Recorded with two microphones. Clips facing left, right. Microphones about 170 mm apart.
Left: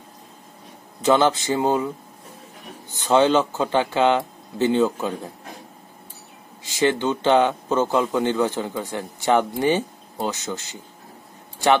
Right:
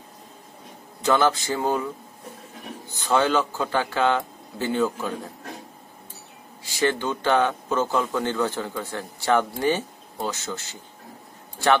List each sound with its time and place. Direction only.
1.0 s a man's voice: 20° left (ahead or behind)
2.9 s a man's voice: 20° left (ahead or behind)
6.6 s a man's voice: 20° left (ahead or behind)